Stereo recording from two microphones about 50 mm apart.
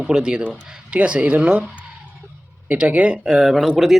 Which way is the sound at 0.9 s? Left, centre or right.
Right.